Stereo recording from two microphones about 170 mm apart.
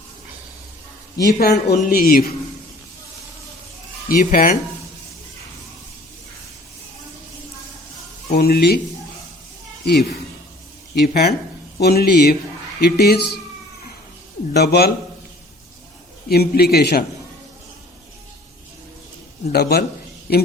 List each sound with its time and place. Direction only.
1.2 s speech: 70° left (ahead or behind)
4.1 s speech: 55° left (ahead or behind)
8.3 s a man's voice: 65° left (ahead or behind)
9.8 s a man's voice: 70° left (ahead or behind)
14.5 s a man's voice: 75° left (ahead or behind)
16.3 s a man's voice: 65° left (ahead or behind)
19.5 s a man's voice: 70° left (ahead or behind)